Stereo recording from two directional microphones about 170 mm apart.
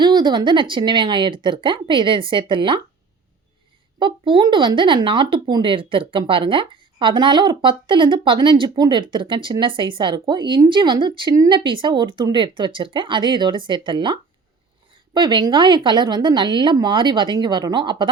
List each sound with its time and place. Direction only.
0.0 s speech: 25° right (ahead or behind)
4.0 s speech: 25° right (ahead or behind)